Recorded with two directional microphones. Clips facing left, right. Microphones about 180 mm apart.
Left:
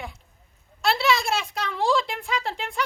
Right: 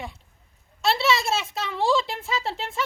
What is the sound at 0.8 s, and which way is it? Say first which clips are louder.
Speech: even; centre (ahead or behind).